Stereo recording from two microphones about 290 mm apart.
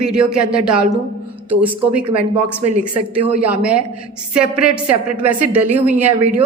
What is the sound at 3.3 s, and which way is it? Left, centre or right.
A woman's voice, centre.